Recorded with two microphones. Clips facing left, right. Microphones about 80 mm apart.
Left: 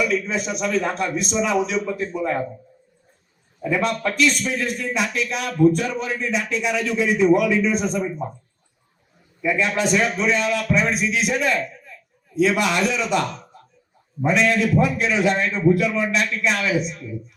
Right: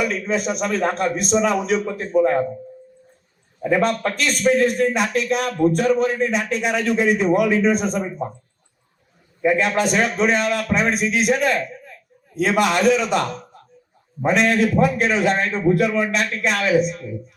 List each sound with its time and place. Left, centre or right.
0.0 s a man's voice: right
3.6 s a man's voice: right
9.4 s a man's voice: right